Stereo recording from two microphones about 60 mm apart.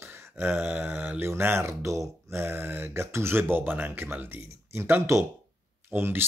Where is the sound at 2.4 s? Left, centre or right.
Right.